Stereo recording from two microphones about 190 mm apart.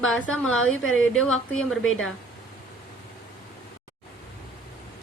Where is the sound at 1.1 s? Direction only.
5° left (ahead or behind).